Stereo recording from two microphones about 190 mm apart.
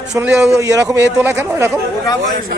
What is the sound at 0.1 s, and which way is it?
Speech, 10° right (ahead or behind).